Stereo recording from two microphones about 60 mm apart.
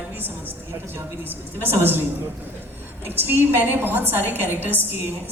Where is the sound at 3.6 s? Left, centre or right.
Right.